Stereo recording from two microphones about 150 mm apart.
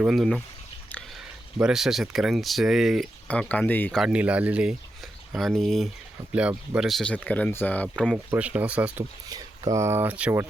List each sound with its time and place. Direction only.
0.0 s speech: centre (ahead or behind)
1.5 s speech: 5° right (ahead or behind)
3.2 s speech: 10° left (ahead or behind)
3.9 s speech: 5° right (ahead or behind)
8.3 s speech: 10° right (ahead or behind)
9.3 s speech: 25° right (ahead or behind)